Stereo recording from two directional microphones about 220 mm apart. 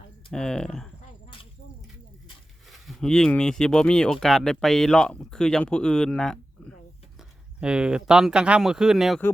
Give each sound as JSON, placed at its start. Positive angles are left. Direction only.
{"t": 0.3, "sound": "speech", "side_deg": 5}
{"t": 2.6, "sound": "speech", "side_deg": 0}